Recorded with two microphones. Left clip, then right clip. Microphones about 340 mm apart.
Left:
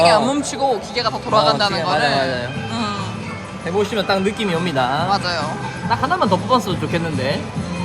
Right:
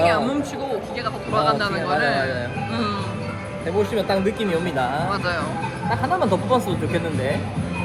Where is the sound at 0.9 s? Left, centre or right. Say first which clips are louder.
Left 4 dB; centre.